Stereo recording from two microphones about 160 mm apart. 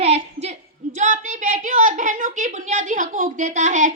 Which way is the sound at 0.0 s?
40° right (ahead or behind).